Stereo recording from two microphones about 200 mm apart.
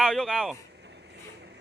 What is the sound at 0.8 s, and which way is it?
Vehicle, 55° right (ahead or behind).